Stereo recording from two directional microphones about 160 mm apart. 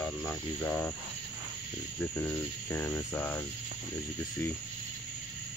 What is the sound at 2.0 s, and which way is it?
Cricket, 15° left (ahead or behind).